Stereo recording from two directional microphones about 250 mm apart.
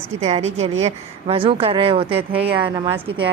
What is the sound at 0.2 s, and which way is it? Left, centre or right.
Speech, right.